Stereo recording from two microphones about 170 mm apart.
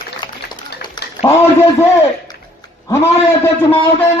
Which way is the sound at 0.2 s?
25° left (ahead or behind).